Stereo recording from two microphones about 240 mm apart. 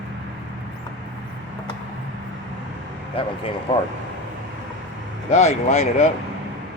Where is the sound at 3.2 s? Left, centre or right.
Left.